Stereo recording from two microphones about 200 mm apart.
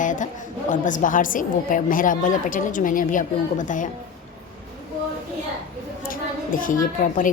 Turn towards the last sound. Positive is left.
turn(degrees=40)  # may be behind; listen again after turning